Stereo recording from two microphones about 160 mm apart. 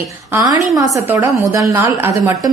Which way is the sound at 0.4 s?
20° right (ahead or behind).